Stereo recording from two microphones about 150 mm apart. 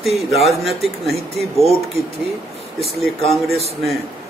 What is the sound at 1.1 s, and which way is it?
Speech, 45° right (ahead or behind).